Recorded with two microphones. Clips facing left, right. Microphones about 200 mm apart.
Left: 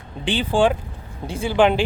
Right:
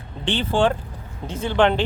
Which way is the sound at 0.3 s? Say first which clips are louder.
Left 1 dB; 15° left (ahead or behind).